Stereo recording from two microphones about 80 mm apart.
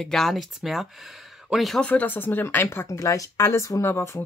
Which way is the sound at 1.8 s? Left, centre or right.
Centre.